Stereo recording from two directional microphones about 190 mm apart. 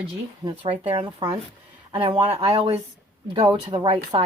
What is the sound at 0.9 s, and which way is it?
A woman's voice, 30° right (ahead or behind).